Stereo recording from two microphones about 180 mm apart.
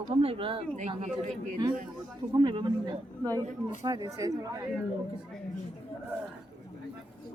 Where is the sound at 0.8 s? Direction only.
40° right (ahead or behind).